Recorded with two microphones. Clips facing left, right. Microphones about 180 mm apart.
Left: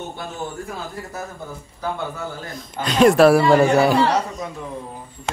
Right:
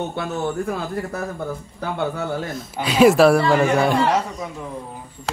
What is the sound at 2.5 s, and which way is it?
Speech, 5° right (ahead or behind).